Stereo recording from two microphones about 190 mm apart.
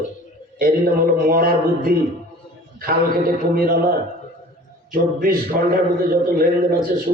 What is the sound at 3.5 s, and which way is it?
Speech, 50° right (ahead or behind).